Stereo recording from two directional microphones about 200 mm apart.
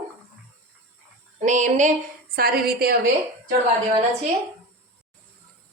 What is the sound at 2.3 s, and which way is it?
Speech, 50° right (ahead or behind).